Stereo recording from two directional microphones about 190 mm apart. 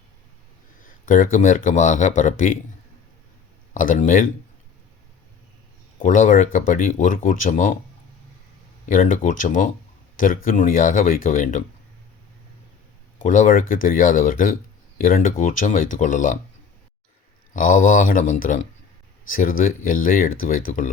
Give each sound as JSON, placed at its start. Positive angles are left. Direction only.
{"t": 1.0, "sound": "speech", "side_deg": 45}
{"t": 3.8, "sound": "speech", "side_deg": 45}
{"t": 6.0, "sound": "speech", "side_deg": 45}
{"t": 8.9, "sound": "speech", "side_deg": 45}
{"t": 13.1, "sound": "speech", "side_deg": 40}
{"t": 17.5, "sound": "speech", "side_deg": 45}